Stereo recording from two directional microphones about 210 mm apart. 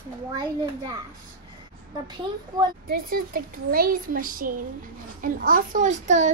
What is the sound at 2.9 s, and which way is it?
A woman's voice, 45° right (ahead or behind).